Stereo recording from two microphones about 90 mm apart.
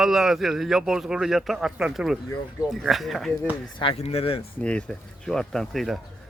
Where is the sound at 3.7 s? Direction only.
80° left.